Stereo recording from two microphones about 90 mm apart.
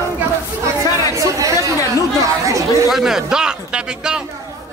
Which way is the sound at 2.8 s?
5° right (ahead or behind).